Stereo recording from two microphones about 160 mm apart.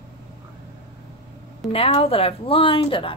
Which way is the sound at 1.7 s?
35° left (ahead or behind).